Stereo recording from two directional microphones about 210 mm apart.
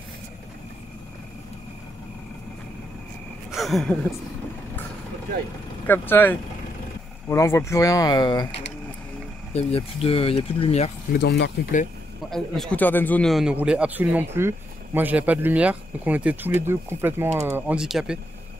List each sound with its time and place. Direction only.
3.5 s a man's voice: centre (ahead or behind)
5.9 s speech: 10° left (ahead or behind)
9.5 s speech: 30° left (ahead or behind)
11.1 s speech: 55° left (ahead or behind)
12.3 s a man's voice: centre (ahead or behind)